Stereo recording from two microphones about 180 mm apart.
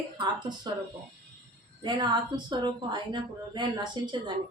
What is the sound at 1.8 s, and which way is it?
A woman's voice, 25° right (ahead or behind).